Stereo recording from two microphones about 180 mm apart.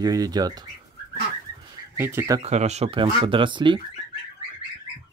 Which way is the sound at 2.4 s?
40° right (ahead or behind).